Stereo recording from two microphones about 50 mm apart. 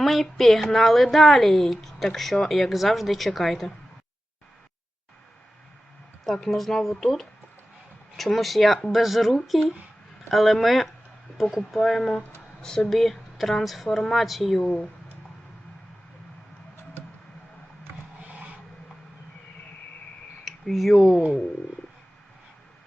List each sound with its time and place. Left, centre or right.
0.0 s a woman's voice: centre
6.2 s a woman's voice: centre
12.9 s a woman's voice: centre
14.6 s speech: centre
18.2 s a sound: right
20.4 s speech: centre